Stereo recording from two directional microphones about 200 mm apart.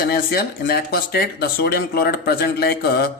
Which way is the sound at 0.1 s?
50° left (ahead or behind).